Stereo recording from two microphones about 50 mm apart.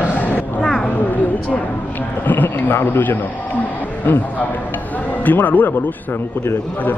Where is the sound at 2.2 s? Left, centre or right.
Left.